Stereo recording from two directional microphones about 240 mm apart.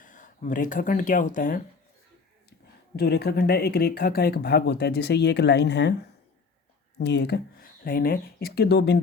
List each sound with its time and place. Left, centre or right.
0.0 s speech: left
7.0 s speech: left